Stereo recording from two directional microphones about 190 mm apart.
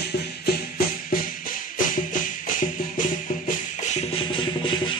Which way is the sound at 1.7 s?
45° left (ahead or behind).